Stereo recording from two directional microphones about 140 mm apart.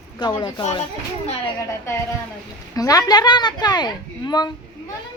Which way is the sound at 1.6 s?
20° left (ahead or behind).